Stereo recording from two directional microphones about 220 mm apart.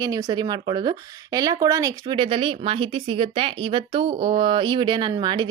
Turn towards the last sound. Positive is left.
turn(degrees=-20)  # may be behind; listen again after turning